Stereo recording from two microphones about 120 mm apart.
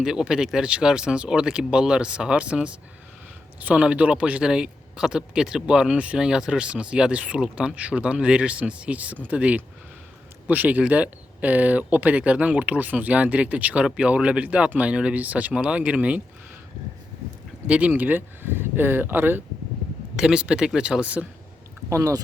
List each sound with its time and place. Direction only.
0.0 s speech: 5° right (ahead or behind)
17.7 s speech: 10° right (ahead or behind)
20.1 s speech: 5° right (ahead or behind)
21.8 s speech: 25° right (ahead or behind)